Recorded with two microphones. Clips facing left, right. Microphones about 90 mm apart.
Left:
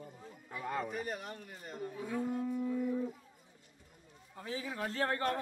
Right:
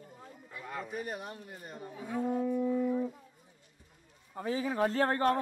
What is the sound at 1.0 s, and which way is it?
A man's voice, 10° right (ahead or behind).